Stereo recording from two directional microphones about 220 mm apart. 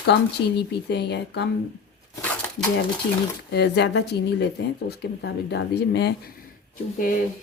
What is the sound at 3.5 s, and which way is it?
Speech, 50° left (ahead or behind).